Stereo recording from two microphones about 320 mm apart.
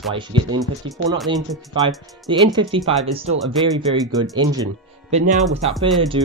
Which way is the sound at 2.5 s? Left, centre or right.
Centre.